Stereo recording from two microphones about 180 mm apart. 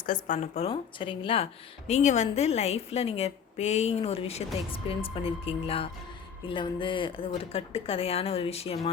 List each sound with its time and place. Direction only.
0.0 s a woman's voice: 45° left (ahead or behind)